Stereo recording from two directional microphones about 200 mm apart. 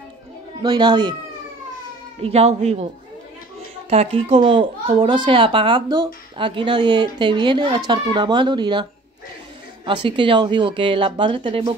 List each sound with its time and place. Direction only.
0.6 s a child's voice: 20° right (ahead or behind)
2.2 s speech: 30° right (ahead or behind)
3.9 s a child's voice: 30° right (ahead or behind)
10.0 s a child's voice: 25° right (ahead or behind)